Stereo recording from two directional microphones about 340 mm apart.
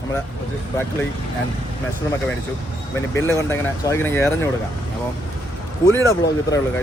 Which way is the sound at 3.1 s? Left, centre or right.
Centre.